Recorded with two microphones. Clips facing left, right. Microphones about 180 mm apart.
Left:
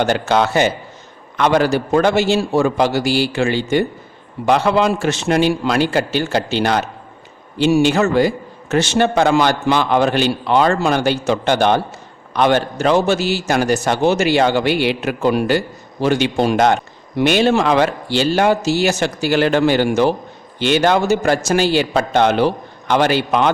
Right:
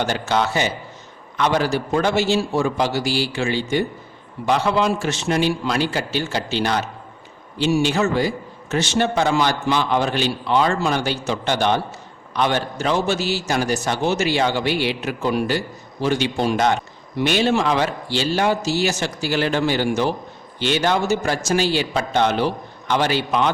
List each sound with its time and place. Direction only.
0.0 s a man's voice: 60° left (ahead or behind)